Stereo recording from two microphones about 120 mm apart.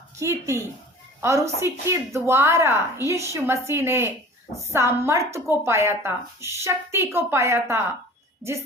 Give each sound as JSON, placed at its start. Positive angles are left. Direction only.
{"t": 0.2, "sound": "speech", "side_deg": -25}